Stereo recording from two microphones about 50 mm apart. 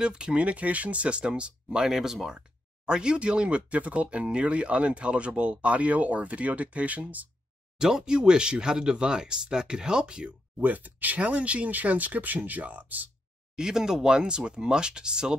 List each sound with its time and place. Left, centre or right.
0.0 s speech: centre
1.9 s speech: centre; by 7.2 s right
7.8 s speech: centre
10.6 s speech: right
13.6 s speech: centre